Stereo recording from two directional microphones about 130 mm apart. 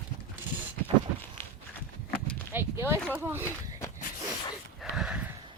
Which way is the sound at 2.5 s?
15° right (ahead or behind).